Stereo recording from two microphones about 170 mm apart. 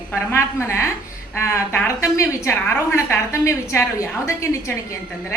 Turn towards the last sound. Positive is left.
turn(degrees=15)  # may be behind; listen again after turning